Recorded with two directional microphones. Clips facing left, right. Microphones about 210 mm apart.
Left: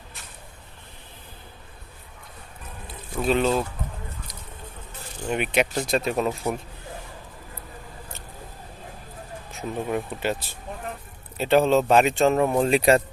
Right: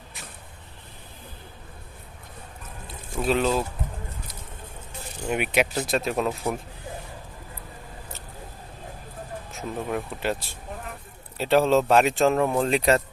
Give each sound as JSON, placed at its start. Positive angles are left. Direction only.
{"t": 3.1, "sound": "speech", "side_deg": 0}
{"t": 5.2, "sound": "speech", "side_deg": -5}
{"t": 9.5, "sound": "speech", "side_deg": 0}